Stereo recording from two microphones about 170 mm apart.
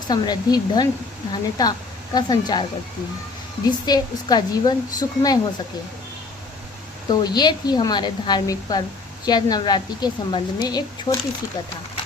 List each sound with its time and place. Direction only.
0.1 s a woman's voice: 25° left (ahead or behind)
3.7 s a woman's voice: 25° left (ahead or behind)
7.1 s a woman's voice: 25° left (ahead or behind)